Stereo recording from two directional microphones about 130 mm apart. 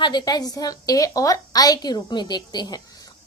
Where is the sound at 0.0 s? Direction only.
35° left (ahead or behind).